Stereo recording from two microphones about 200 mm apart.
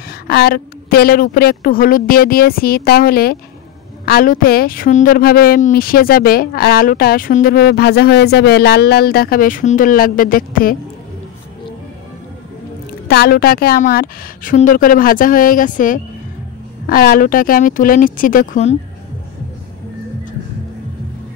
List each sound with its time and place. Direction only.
0.3 s a woman's voice: 50° left (ahead or behind)
13.1 s a woman's voice: 50° left (ahead or behind)